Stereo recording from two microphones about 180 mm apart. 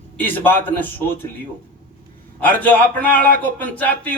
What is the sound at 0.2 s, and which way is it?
Speech, 10° left (ahead or behind).